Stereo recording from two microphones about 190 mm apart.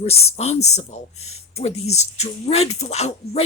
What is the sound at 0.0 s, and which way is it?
Speech, 35° left (ahead or behind).